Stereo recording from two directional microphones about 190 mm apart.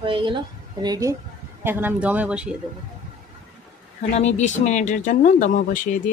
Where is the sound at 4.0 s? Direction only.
35° left (ahead or behind).